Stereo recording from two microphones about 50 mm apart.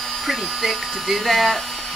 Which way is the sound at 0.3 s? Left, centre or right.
Centre.